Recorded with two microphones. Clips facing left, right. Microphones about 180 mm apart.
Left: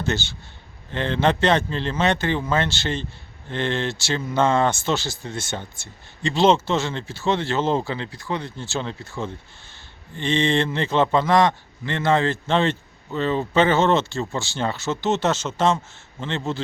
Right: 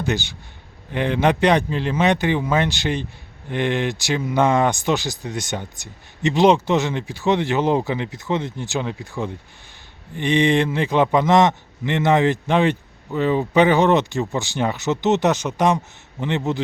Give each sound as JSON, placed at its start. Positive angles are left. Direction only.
{"t": 0.0, "sound": "speech", "side_deg": -15}